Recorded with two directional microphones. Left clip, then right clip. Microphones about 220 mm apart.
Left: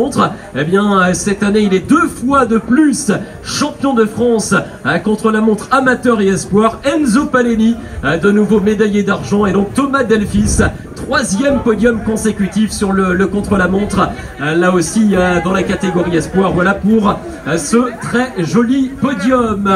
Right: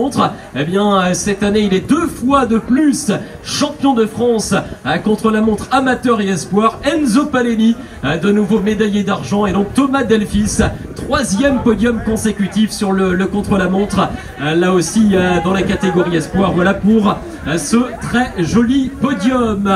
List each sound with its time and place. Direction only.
0.1 s a man's voice: 55° right (ahead or behind)